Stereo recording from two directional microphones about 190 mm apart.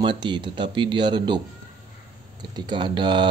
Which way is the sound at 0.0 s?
25° right (ahead or behind).